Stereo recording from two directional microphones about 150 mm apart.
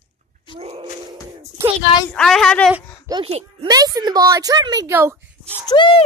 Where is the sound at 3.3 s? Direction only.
45° right (ahead or behind).